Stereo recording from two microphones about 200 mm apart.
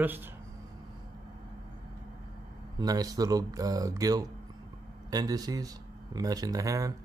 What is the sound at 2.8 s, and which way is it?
Speech, 20° right (ahead or behind).